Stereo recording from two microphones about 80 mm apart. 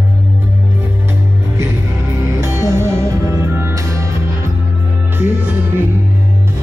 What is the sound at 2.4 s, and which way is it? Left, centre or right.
Music, right.